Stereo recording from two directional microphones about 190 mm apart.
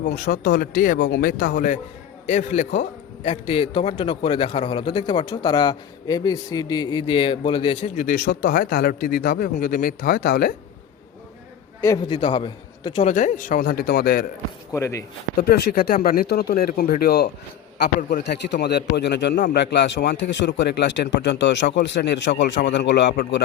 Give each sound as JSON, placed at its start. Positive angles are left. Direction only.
{"t": 0.3, "sound": "a man's voice", "side_deg": 50}
{"t": 8.0, "sound": "a man's voice", "side_deg": 50}
{"t": 11.8, "sound": "a man's voice", "side_deg": 15}
{"t": 12.1, "sound": "a man's voice", "side_deg": 25}
{"t": 13.1, "sound": "a man's voice", "side_deg": 40}
{"t": 14.7, "sound": "a man's voice", "side_deg": 15}
{"t": 15.4, "sound": "a man's voice", "side_deg": 55}